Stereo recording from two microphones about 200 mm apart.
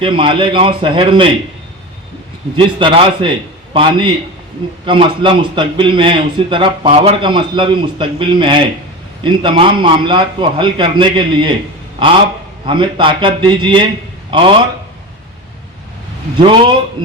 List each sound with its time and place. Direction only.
0.0 s a man's voice: 25° right (ahead or behind)
2.7 s a man's voice: 25° right (ahead or behind)
12.6 s a man's voice: 25° right (ahead or behind)
16.4 s a man's voice: 25° right (ahead or behind)